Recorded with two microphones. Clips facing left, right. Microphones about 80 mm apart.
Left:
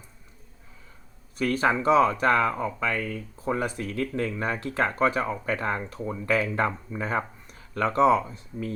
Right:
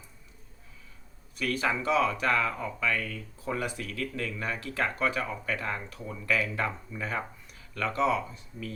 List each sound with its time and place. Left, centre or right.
1.4 s speech: left